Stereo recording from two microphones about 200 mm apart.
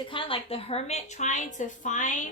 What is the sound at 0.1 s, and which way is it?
A woman's voice, 25° left (ahead or behind).